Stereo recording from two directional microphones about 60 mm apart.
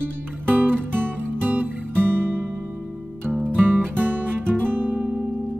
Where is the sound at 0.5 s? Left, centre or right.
Right.